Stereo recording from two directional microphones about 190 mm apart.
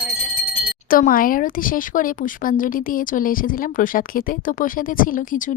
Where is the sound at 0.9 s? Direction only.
50° left (ahead or behind).